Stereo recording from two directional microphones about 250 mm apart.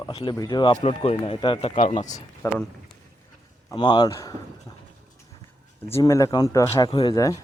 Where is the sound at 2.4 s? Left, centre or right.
Centre.